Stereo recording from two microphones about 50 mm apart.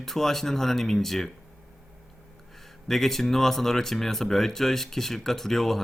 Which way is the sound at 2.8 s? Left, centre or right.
Centre.